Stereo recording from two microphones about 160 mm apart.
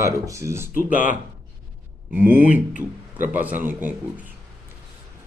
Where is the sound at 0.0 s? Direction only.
20° right (ahead or behind).